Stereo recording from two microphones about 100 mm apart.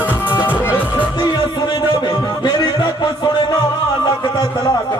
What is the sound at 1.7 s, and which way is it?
Music, 45° left (ahead or behind).